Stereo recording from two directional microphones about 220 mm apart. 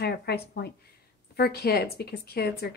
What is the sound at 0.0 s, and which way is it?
A woman's voice, 45° left (ahead or behind).